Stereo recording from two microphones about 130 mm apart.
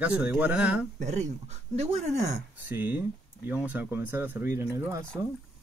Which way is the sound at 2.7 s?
15° right (ahead or behind).